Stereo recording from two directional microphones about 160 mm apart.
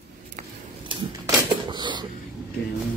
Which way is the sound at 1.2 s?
30° right (ahead or behind).